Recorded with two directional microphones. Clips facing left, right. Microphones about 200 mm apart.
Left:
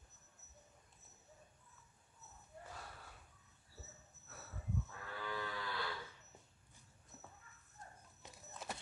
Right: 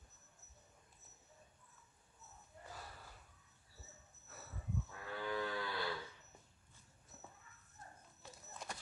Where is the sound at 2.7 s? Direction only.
Centre (ahead or behind).